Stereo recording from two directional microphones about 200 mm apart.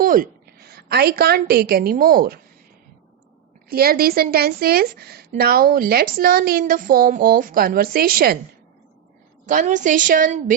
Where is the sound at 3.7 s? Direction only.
50° right (ahead or behind).